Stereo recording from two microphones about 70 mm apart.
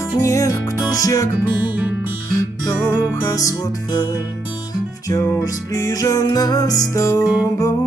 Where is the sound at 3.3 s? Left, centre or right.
Left.